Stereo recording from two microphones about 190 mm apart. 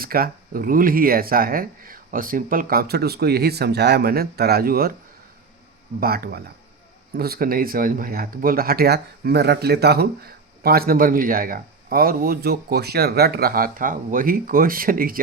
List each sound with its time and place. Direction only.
0.0 s speech: 50° right (ahead or behind)
6.0 s speech: 55° right (ahead or behind)